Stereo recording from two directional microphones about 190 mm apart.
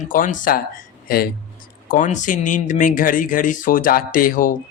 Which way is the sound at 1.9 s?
40° left (ahead or behind).